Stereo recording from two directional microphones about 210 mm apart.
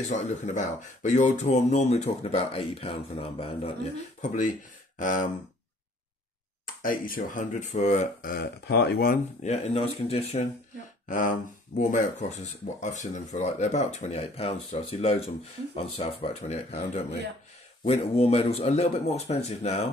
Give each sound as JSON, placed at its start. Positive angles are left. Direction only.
{"t": 0.0, "sound": "speech", "side_deg": 35}
{"t": 6.6, "sound": "speech", "side_deg": 40}
{"t": 11.1, "sound": "speech", "side_deg": 40}